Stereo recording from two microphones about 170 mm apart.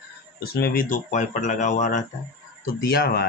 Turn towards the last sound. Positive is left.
turn(degrees=65)  # may be behind; listen again after turning